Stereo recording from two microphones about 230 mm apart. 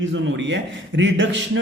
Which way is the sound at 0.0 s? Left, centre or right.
Right.